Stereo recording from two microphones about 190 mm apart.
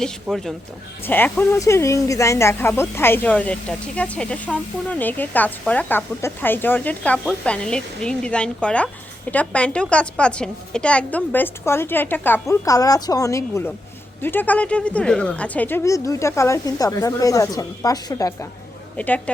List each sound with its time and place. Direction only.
0.0 s speech: centre (ahead or behind)